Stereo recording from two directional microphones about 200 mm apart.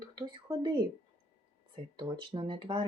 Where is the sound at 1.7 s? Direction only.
25° right (ahead or behind).